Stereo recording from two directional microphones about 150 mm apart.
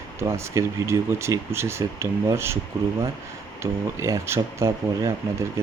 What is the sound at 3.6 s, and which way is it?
Speech, 20° right (ahead or behind).